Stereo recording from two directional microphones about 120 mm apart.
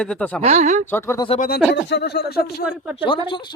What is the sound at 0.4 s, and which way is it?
Speech, 70° right (ahead or behind).